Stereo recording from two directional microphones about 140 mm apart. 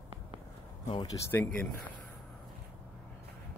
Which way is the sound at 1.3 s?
20° left (ahead or behind).